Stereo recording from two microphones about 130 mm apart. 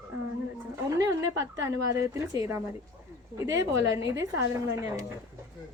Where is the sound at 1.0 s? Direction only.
25° right (ahead or behind).